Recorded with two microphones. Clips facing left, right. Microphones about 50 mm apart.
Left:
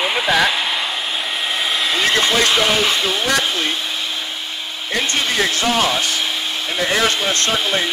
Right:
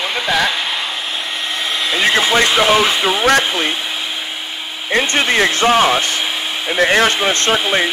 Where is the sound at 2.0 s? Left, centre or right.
Centre.